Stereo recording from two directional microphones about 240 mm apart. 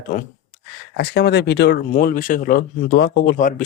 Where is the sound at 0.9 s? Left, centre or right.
Left.